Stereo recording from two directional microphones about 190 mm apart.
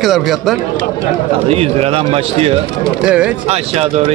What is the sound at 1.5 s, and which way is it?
A man's voice, 30° right (ahead or behind).